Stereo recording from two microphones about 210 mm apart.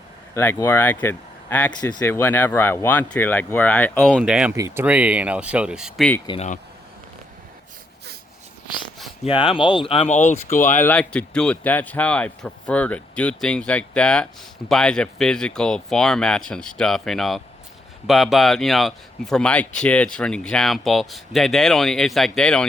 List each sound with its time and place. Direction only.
0.3 s speech: 10° left (ahead or behind)
4.2 s speech: 5° right (ahead or behind)
6.2 s speech: 30° left (ahead or behind)
9.2 s speech: 25° left (ahead or behind)
10.8 s speech: 5° left (ahead or behind)